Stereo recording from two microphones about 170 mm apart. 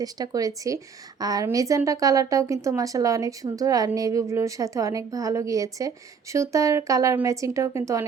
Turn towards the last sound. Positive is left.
turn(degrees=-20)  # may be behind; listen again after turning